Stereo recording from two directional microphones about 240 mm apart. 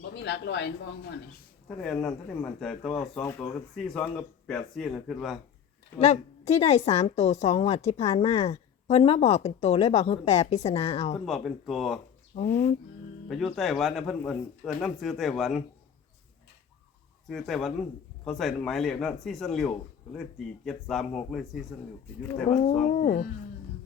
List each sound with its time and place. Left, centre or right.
0.2 s speech: left
1.6 s speech: centre
6.0 s a woman's voice: left
11.3 s speech: centre
12.3 s speech: left
13.2 s speech: centre
17.2 s speech: centre
22.4 s a woman's voice: left